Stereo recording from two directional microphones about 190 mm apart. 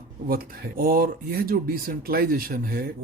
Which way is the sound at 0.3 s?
50° right (ahead or behind).